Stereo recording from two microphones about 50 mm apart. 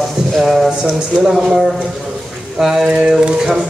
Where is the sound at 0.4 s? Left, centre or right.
Centre.